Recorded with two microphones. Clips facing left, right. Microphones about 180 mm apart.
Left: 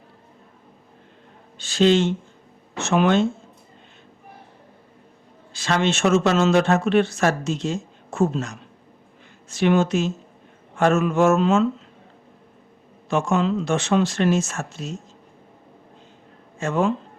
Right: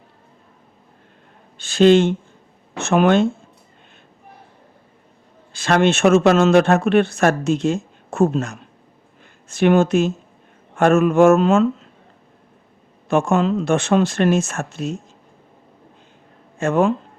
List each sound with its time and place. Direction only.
1.5 s speech: 55° right (ahead or behind)
5.5 s speech: 55° right (ahead or behind)
13.1 s speech: 55° right (ahead or behind)
16.6 s speech: 55° right (ahead or behind)